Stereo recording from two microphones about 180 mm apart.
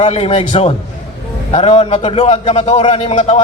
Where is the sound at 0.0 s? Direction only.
35° left (ahead or behind).